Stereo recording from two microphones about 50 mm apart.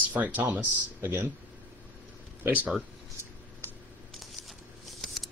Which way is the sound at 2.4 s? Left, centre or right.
Right.